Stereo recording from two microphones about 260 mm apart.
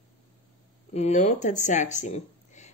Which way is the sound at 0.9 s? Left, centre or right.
Left.